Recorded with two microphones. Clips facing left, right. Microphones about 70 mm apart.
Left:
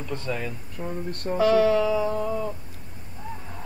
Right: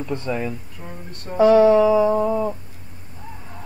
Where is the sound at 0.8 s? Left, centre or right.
Centre.